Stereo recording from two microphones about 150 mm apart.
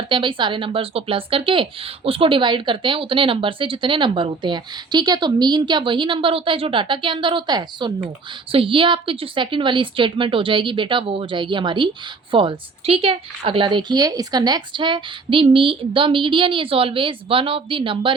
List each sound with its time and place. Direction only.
0.1 s speech: 35° right (ahead or behind)